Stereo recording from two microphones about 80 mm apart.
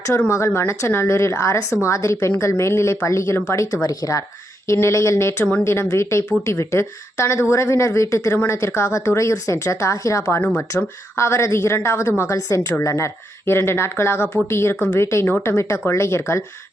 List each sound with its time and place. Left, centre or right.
0.3 s speech: left
10.4 s speech: left
10.7 s speech: left